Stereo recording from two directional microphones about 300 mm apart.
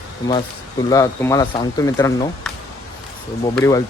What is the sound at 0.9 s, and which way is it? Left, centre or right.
Speech, centre.